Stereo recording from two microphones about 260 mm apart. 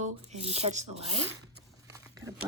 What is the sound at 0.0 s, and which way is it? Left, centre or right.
Speech, right.